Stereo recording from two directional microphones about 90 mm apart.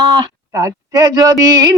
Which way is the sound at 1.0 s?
40° right (ahead or behind).